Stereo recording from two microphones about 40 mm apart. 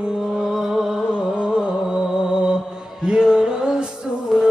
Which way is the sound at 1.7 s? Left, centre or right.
Centre.